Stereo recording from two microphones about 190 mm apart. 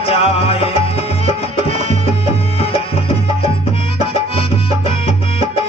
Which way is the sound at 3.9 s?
30° left (ahead or behind).